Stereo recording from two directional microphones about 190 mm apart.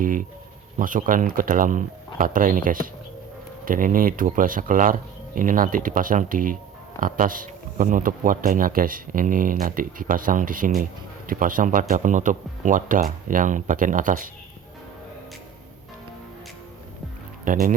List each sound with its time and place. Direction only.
0.0 s speech: 45° right (ahead or behind)
17.4 s speech: 45° right (ahead or behind)